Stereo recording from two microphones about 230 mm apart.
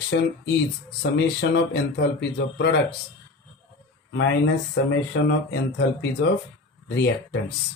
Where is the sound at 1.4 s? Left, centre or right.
Left.